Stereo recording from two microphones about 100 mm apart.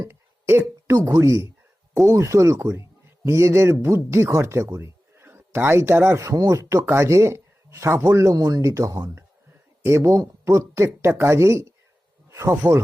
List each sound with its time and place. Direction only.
0.1 s a sound: 25° right (ahead or behind)
1.0 s speech: 35° right (ahead or behind)
6.2 s speech: 35° right (ahead or behind)